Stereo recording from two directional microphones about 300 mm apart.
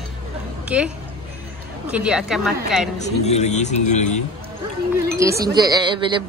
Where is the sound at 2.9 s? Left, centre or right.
Left.